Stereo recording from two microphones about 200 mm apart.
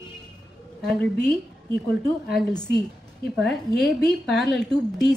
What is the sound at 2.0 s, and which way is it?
Speech, 55° left (ahead or behind).